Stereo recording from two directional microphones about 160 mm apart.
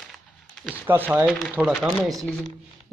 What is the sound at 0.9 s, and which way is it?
A man's voice, 10° right (ahead or behind).